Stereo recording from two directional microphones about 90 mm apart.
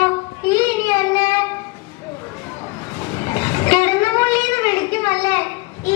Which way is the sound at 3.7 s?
55° left (ahead or behind).